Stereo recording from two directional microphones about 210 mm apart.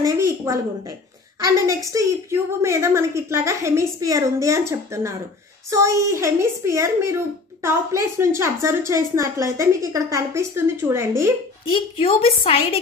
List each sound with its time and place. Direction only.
0.0 s a woman's voice: 15° right (ahead or behind)
11.7 s a woman's voice: 25° left (ahead or behind)